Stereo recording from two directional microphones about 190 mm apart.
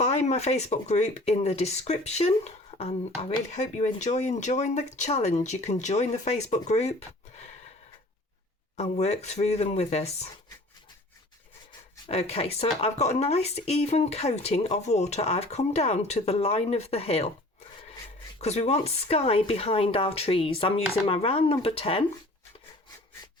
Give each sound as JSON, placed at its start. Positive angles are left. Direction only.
{"t": 0.0, "sound": "speech", "side_deg": 35}
{"t": 8.7, "sound": "speech", "side_deg": 35}
{"t": 12.0, "sound": "speech", "side_deg": 30}
{"t": 18.3, "sound": "speech", "side_deg": 35}